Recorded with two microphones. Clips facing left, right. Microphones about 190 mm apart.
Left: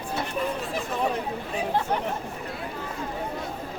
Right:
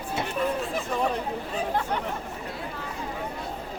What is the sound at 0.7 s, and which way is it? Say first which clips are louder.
Chatter: left 3 dB; 5° left (ahead or behind).